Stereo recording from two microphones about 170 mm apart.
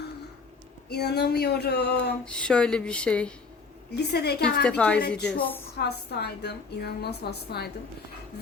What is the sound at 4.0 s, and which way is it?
Speech, 70° left (ahead or behind).